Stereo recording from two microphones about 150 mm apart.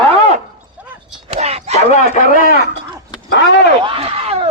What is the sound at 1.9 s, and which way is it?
Speech, 60° left (ahead or behind).